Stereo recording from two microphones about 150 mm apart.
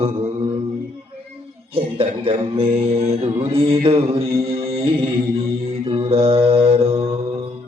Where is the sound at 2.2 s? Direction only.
40° right (ahead or behind).